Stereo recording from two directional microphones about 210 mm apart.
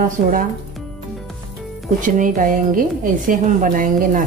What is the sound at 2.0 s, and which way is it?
A woman's voice, 40° right (ahead or behind).